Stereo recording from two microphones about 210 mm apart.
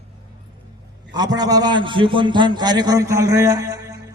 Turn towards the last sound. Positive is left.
turn(degrees=-15)  # may be behind; listen again after turning